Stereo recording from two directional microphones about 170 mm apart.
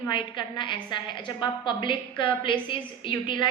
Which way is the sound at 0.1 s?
30° left (ahead or behind).